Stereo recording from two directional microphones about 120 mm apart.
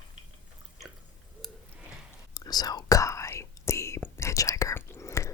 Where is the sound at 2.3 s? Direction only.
30° left (ahead or behind).